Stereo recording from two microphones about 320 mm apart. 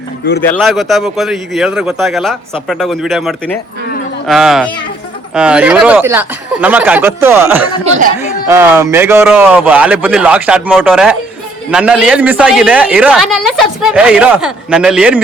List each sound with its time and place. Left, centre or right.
0.4 s a woman's voice: centre
7.9 s speech: right
8.4 s a woman's voice: centre